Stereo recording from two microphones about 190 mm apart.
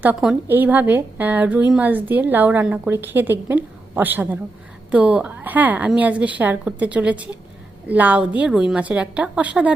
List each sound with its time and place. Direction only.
0.0 s a woman's voice: 5° right (ahead or behind)